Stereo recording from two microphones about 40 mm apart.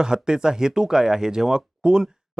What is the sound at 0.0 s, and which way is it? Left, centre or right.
Speech, right.